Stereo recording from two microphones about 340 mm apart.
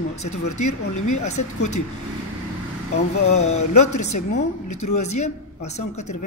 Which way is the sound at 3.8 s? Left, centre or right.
Left.